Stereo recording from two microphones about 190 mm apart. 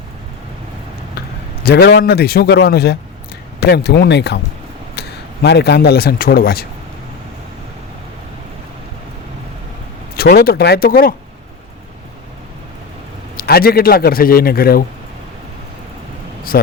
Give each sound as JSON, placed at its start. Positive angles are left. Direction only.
{"t": 1.6, "sound": "a man's voice", "side_deg": 55}
{"t": 10.2, "sound": "a man's voice", "side_deg": 55}
{"t": 13.3, "sound": "a man's voice", "side_deg": 55}